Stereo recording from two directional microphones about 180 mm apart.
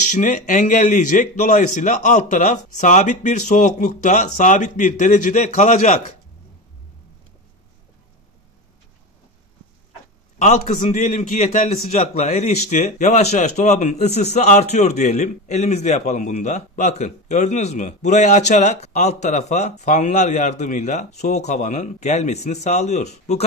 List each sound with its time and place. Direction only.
0.0 s speech: 45° left (ahead or behind)
10.4 s a man's voice: 40° left (ahead or behind)